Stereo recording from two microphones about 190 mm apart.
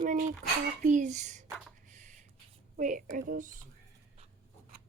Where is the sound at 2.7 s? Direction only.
45° right (ahead or behind).